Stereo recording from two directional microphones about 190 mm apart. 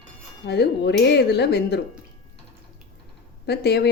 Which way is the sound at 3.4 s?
60° left (ahead or behind).